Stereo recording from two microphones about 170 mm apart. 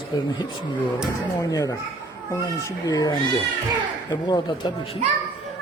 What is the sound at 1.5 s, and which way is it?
Speech, 20° left (ahead or behind).